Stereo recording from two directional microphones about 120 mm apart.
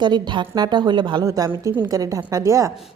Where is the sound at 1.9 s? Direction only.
30° right (ahead or behind).